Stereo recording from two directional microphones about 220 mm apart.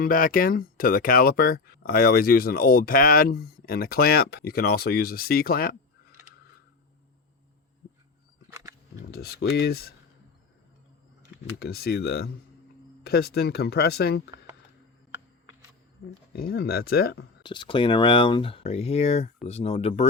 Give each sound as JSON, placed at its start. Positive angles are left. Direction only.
{"t": 0.0, "sound": "speech", "side_deg": 40}
{"t": 9.0, "sound": "speech", "side_deg": 45}
{"t": 11.6, "sound": "speech", "side_deg": 45}
{"t": 16.3, "sound": "speech", "side_deg": 45}
{"t": 17.4, "sound": "speech", "side_deg": 20}